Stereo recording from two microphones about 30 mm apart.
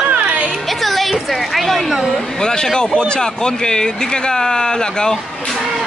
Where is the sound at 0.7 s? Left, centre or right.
Centre.